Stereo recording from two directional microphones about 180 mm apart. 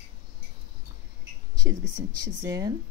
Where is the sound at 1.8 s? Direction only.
90° right.